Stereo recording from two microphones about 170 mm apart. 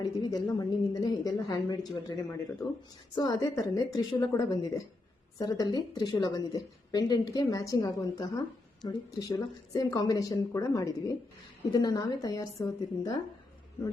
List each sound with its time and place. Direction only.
0.0 s a woman's voice: 20° left (ahead or behind)